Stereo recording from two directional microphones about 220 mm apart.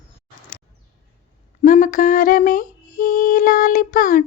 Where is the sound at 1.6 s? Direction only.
35° left (ahead or behind).